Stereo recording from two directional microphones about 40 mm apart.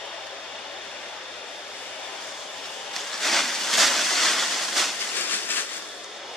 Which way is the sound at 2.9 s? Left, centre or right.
Centre.